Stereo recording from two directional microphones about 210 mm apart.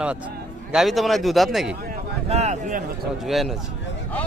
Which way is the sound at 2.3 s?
30° right (ahead or behind).